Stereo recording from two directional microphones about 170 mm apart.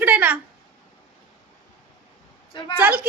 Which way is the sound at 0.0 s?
10° right (ahead or behind).